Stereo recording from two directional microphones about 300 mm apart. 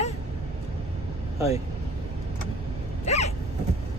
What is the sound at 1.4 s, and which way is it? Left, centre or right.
Speech, centre.